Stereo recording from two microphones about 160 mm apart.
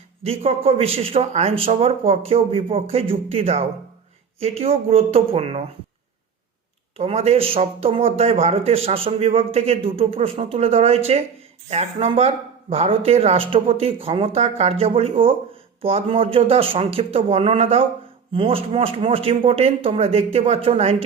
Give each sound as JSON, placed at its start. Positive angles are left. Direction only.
{"t": 0.2, "sound": "speech", "side_deg": -35}
{"t": 6.9, "sound": "speech", "side_deg": -40}